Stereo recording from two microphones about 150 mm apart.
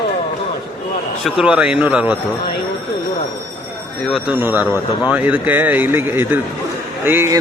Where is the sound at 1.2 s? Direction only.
5° right (ahead or behind).